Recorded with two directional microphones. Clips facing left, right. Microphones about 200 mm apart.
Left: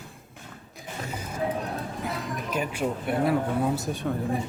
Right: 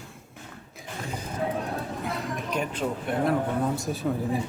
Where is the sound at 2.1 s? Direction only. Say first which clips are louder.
Even; 5° left (ahead or behind).